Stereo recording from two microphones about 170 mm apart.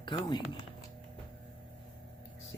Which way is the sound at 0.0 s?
25° left (ahead or behind).